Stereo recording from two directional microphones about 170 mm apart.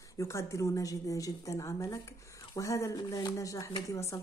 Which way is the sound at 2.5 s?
20° left (ahead or behind).